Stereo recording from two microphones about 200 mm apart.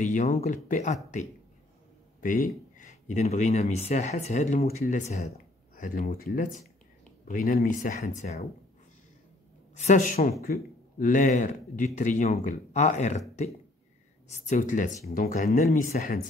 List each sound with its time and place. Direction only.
0.0 s speech: 35° left (ahead or behind)
2.2 s speech: 40° left (ahead or behind)
9.8 s speech: 35° left (ahead or behind)
14.3 s speech: 35° left (ahead or behind)